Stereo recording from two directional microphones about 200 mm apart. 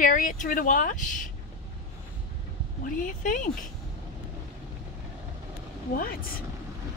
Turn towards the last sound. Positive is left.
turn(degrees=45)  # may be behind; listen again after turning